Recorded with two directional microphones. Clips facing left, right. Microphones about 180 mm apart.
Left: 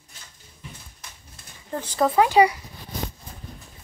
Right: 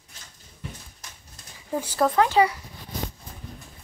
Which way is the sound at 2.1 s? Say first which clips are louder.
Left 4 dB; 10° left (ahead or behind).